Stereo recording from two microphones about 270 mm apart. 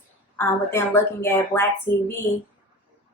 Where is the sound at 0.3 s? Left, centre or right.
Centre.